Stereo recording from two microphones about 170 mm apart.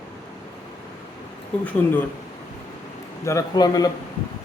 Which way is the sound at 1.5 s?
5° left (ahead or behind).